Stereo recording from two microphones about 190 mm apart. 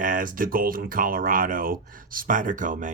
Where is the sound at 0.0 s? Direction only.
45° right (ahead or behind).